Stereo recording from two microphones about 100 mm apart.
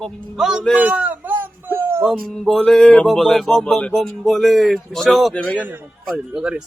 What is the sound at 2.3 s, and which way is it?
Speech, 5° left (ahead or behind).